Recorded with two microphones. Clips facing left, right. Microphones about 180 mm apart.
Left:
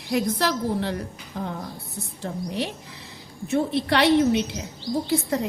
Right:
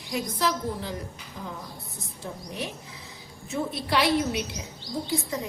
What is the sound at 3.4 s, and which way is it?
Speech, 70° left (ahead or behind).